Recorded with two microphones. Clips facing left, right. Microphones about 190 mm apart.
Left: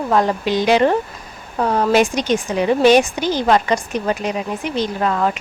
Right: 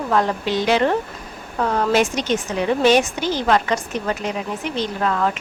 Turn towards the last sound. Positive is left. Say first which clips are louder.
# left 2 dB
turn(degrees=15)  # may be behind; listen again after turning